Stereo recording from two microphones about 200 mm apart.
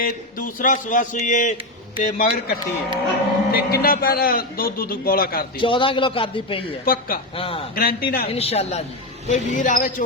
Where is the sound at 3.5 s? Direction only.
50° left (ahead or behind).